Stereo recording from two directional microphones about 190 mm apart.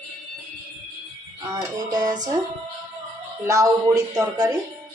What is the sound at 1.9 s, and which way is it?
Music, 20° right (ahead or behind).